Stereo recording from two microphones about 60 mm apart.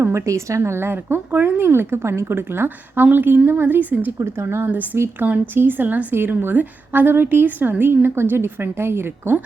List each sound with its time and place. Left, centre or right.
0.0 s speech: right